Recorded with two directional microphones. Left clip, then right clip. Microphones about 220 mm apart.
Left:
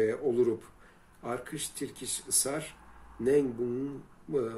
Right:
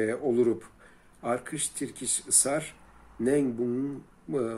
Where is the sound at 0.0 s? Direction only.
Centre (ahead or behind).